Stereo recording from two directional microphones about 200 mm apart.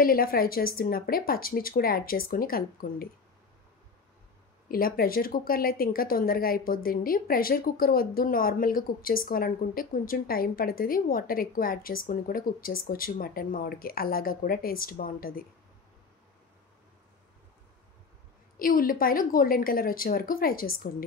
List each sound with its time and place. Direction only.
0.0 s speech: 45° left (ahead or behind)
4.6 s speech: 45° left (ahead or behind)
18.6 s speech: 45° left (ahead or behind)